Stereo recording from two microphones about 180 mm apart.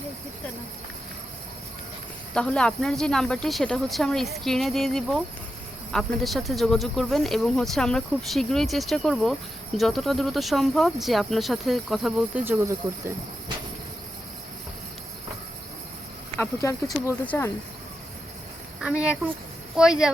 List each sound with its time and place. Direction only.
2.3 s speech: 5° left (ahead or behind); by 12.7 s 15° right (ahead or behind)
16.4 s speech: 15° left (ahead or behind)
18.8 s speech: 5° right (ahead or behind)